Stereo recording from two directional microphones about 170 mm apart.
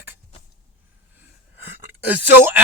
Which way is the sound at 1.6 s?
10° right (ahead or behind).